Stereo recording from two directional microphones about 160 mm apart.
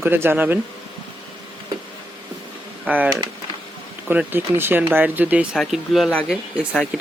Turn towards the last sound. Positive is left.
turn(degrees=0)  # may be behind; listen again after turning